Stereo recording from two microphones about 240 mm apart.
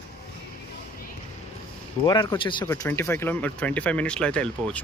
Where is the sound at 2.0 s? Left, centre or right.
Centre.